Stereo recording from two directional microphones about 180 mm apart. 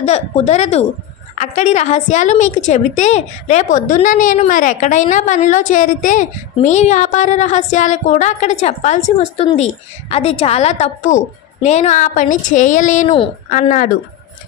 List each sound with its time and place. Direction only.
0.0 s a woman's voice: 40° left (ahead or behind)